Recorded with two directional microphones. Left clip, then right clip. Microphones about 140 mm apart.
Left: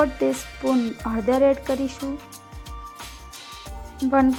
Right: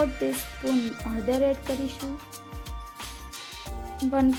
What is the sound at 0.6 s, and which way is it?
Music, centre (ahead or behind).